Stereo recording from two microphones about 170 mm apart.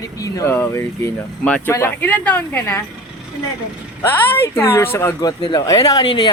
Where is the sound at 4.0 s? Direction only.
15° left (ahead or behind).